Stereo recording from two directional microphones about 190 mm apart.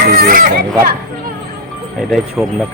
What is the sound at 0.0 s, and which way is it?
Children playing, 50° right (ahead or behind).